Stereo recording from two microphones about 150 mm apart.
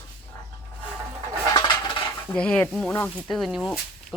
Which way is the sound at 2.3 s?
10° left (ahead or behind).